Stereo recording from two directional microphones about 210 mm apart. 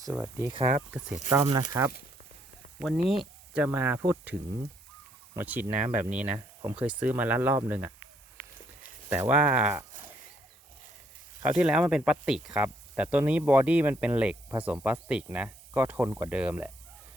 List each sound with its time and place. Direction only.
0.1 s speech: 10° right (ahead or behind)
0.5 s speech: 30° right (ahead or behind)
1.3 s speech: 15° right (ahead or behind)
2.8 s speech: 5° right (ahead or behind)
9.0 s speech: 10° right (ahead or behind)
11.4 s speech: 5° right (ahead or behind)